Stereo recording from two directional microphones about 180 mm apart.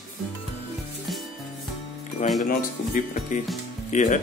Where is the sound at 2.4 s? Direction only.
45° left (ahead or behind).